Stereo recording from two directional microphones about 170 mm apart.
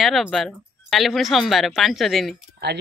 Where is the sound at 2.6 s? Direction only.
75° right (ahead or behind).